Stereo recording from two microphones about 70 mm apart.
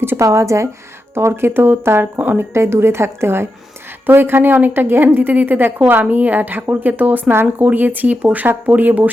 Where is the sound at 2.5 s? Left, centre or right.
Right.